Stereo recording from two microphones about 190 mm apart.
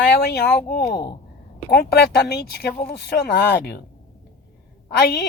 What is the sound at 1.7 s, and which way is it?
A woman's voice, 55° left (ahead or behind).